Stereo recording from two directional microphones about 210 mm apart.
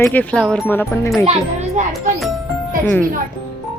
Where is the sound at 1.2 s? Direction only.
30° right (ahead or behind).